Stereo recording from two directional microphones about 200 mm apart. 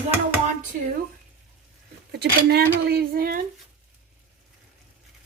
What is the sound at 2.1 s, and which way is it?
Speech, 55° right (ahead or behind).